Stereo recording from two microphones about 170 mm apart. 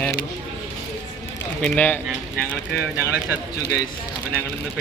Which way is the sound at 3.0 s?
10° right (ahead or behind).